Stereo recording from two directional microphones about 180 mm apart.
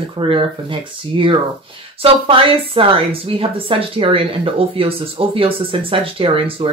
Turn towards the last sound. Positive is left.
turn(degrees=-30)  # may be behind; listen again after turning